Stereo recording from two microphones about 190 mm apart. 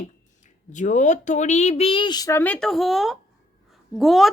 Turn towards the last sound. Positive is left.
turn(degrees=0)  # may be behind; listen again after turning